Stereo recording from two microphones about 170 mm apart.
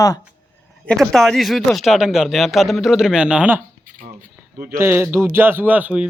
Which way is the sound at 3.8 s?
50° right (ahead or behind).